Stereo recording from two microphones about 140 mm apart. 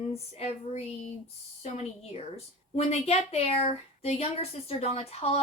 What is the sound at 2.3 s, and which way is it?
Speech, 50° left (ahead or behind).